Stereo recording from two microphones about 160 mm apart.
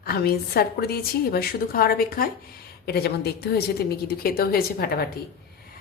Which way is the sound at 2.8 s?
80° left.